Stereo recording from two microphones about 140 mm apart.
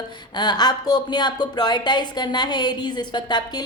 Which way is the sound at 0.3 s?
30° left (ahead or behind).